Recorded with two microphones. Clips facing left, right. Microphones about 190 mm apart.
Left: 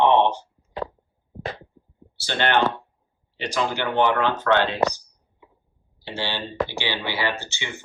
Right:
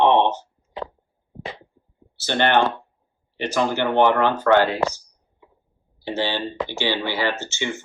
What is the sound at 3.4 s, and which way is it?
Speech, 15° left (ahead or behind).